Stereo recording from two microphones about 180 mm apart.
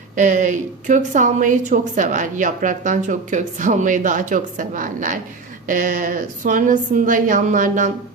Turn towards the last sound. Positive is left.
turn(degrees=-45)  # may be behind; listen again after turning